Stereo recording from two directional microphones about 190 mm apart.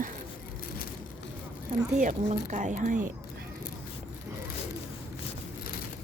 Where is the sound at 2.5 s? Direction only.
40° right (ahead or behind).